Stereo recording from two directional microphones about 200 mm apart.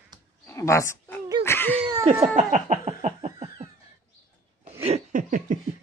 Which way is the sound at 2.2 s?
40° right (ahead or behind).